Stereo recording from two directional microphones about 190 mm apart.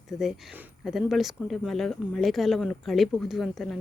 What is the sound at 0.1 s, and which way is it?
Speech, centre (ahead or behind).